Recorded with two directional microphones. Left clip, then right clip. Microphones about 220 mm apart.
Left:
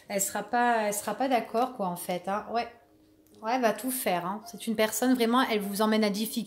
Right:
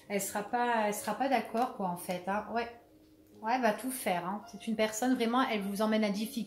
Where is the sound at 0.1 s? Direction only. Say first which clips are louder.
Left 4 dB; 55° left (ahead or behind).